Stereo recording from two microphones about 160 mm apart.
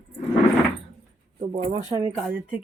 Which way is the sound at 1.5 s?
35° right (ahead or behind).